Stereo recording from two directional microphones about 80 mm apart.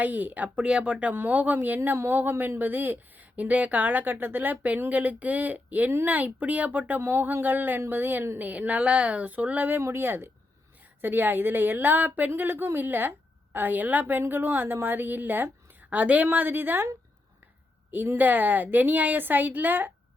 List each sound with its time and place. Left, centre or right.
0.0 s a woman's voice: right
18.2 s a woman's voice: right